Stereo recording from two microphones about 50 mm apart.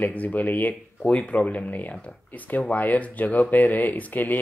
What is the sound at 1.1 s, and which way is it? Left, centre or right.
Speech, left.